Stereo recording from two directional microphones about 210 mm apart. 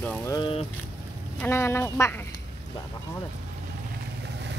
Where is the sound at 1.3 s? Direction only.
10° left (ahead or behind).